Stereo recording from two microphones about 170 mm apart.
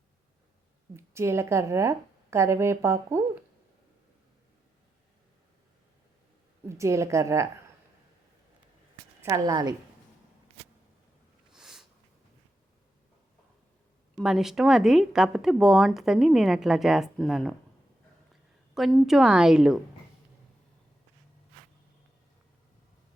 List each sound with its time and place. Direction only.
0.9 s a woman's voice: 15° right (ahead or behind)
6.7 s a woman's voice: 15° right (ahead or behind)
9.2 s a woman's voice: 20° right (ahead or behind)
11.5 s a sound: centre (ahead or behind)
14.2 s speech: centre (ahead or behind)
18.7 s speech: centre (ahead or behind)